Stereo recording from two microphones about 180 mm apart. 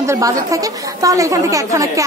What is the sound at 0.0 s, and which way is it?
A woman's voice, 15° right (ahead or behind).